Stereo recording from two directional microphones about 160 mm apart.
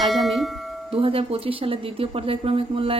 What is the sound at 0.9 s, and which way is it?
A woman's voice, 35° right (ahead or behind).